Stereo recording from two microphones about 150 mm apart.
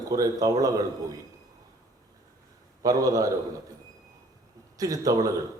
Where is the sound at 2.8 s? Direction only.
25° right (ahead or behind).